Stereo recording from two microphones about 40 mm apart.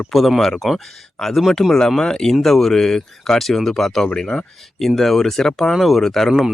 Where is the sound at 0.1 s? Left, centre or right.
Centre.